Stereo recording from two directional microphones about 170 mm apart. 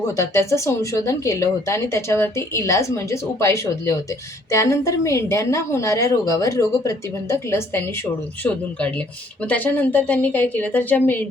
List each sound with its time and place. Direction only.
0.2 s a woman's voice: 15° left (ahead or behind)
9.4 s a woman's voice: 10° left (ahead or behind)